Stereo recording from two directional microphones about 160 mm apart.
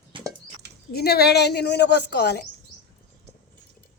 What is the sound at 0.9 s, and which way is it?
A woman's voice, 80° left.